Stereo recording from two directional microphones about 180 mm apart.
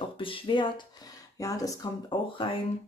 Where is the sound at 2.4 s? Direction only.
30° left (ahead or behind).